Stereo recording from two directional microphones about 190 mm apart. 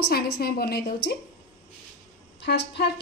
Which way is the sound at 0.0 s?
55° left (ahead or behind).